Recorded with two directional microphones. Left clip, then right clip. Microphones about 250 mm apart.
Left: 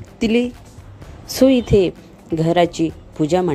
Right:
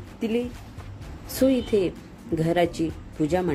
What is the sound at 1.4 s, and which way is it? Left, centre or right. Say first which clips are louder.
Speech: left 8 dB; left.